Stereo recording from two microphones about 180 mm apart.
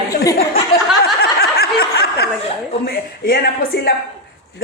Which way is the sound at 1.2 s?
60° left (ahead or behind).